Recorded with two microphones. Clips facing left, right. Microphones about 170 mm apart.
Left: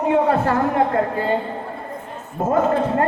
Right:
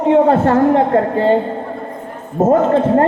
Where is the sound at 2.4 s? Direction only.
45° right (ahead or behind).